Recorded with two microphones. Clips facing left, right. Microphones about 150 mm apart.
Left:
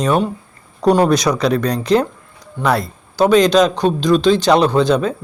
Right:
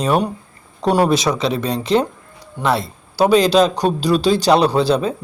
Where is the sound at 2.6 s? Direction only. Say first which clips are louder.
Left 2 dB; 15° right (ahead or behind).